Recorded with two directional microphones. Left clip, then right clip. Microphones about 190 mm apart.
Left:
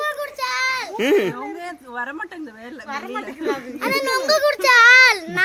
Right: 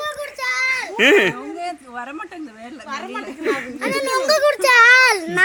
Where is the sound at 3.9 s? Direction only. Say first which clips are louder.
Right 1 dB; 20° right (ahead or behind).